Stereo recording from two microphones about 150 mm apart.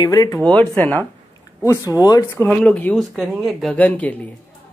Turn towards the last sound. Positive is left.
turn(degrees=10)  # may be behind; listen again after turning